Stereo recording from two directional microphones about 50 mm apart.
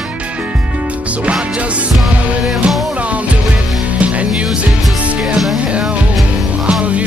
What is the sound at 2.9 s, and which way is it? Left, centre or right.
Music, right.